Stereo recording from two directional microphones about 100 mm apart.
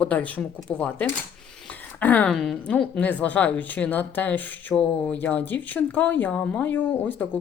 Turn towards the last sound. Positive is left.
turn(degrees=15)  # may be behind; listen again after turning